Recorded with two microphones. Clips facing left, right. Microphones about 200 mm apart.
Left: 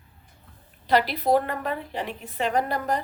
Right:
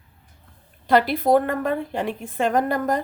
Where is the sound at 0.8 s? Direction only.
50° right (ahead or behind).